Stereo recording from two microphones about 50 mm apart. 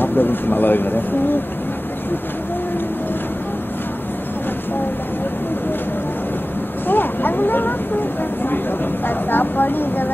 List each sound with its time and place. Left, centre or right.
0.0 s speech: left
6.9 s a sound: left
9.0 s speech: left